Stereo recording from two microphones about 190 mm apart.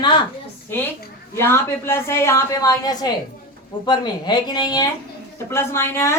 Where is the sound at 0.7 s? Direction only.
10° left (ahead or behind).